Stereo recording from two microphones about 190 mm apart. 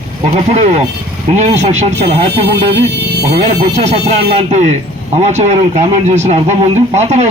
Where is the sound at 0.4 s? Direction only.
35° right (ahead or behind).